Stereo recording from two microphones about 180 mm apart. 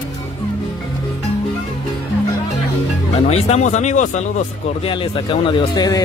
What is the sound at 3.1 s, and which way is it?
Speech, 35° left (ahead or behind).